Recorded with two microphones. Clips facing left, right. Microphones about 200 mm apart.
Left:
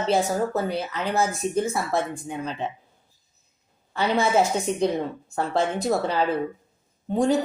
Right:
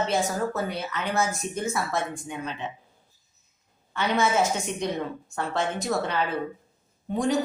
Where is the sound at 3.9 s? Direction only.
35° left (ahead or behind).